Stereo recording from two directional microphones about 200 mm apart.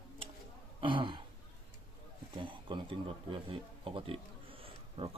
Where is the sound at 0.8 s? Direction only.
25° right (ahead or behind).